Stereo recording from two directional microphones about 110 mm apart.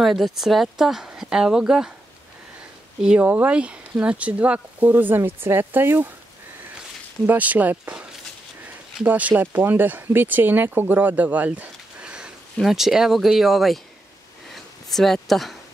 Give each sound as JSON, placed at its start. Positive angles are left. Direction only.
{"t": 0.0, "sound": "speech", "side_deg": 0}
{"t": 3.0, "sound": "speech", "side_deg": -10}
{"t": 7.2, "sound": "speech", "side_deg": -15}
{"t": 14.5, "sound": "a sound", "side_deg": 0}
{"t": 15.2, "sound": "speech", "side_deg": 0}